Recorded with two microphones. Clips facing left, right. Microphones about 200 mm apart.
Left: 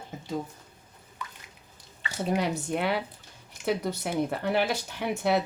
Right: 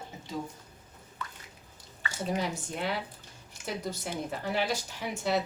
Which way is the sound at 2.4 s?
65° left (ahead or behind).